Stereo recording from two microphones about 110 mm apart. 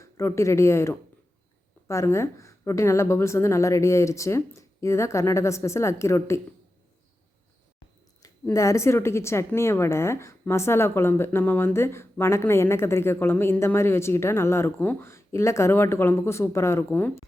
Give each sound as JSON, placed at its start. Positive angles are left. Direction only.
{"t": 0.0, "sound": "speech", "side_deg": 25}
{"t": 8.5, "sound": "speech", "side_deg": 25}